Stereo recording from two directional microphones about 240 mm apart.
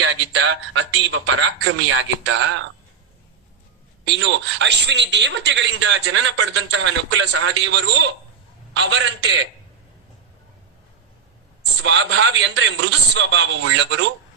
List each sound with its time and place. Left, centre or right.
0.0 s a man's voice: right
4.0 s a man's voice: right
11.8 s a man's voice: right